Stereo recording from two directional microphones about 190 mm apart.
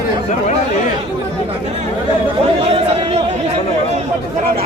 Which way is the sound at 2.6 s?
30° right (ahead or behind).